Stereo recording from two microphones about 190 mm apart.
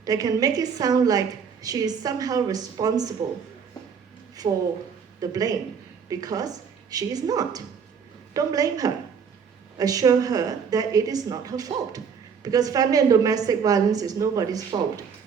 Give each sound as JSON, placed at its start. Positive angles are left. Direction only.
{"t": 0.0, "sound": "a woman's voice", "side_deg": -20}
{"t": 4.4, "sound": "a woman's voice", "side_deg": -30}